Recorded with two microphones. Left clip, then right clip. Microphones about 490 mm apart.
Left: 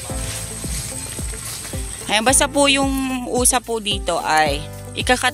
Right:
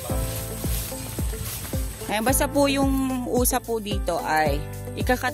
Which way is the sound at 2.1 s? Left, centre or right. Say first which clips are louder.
Left 6 dB; right.